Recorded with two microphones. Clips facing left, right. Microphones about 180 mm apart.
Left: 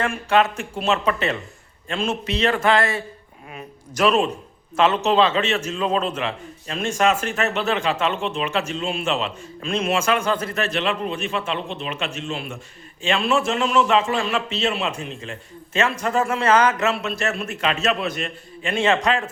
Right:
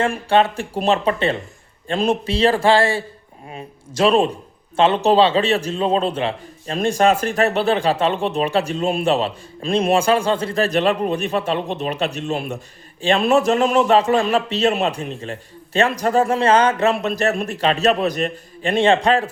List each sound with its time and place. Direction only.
0.0 s a man's voice: 30° right (ahead or behind)